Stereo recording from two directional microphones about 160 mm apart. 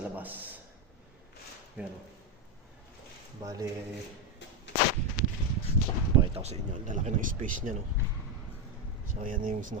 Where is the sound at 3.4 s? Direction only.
20° right (ahead or behind).